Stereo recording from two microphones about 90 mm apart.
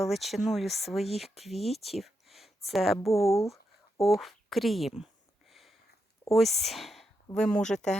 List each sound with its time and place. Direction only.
0.0 s speech: centre (ahead or behind)
3.1 s speech: 35° left (ahead or behind)
4.0 s speech: centre (ahead or behind)
5.5 s a sound: centre (ahead or behind)
6.3 s speech: centre (ahead or behind)